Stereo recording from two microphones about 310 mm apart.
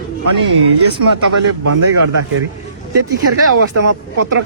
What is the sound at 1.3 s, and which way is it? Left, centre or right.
Speech, right.